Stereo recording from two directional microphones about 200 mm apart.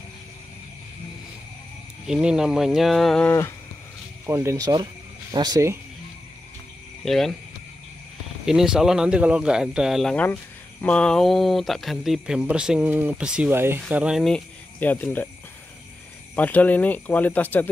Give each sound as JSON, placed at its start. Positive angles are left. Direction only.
{"t": 2.0, "sound": "speech", "side_deg": -5}
{"t": 4.3, "sound": "speech", "side_deg": -15}
{"t": 7.1, "sound": "speech", "side_deg": 0}
{"t": 8.5, "sound": "speech", "side_deg": -5}
{"t": 16.3, "sound": "speech", "side_deg": 10}